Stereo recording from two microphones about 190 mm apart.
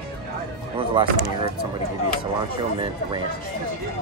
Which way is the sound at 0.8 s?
25° right (ahead or behind).